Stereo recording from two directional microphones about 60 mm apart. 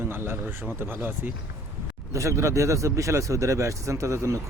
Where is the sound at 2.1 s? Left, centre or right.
Right.